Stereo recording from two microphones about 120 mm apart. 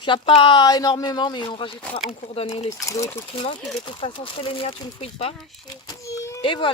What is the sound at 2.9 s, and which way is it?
Speech, 25° left (ahead or behind).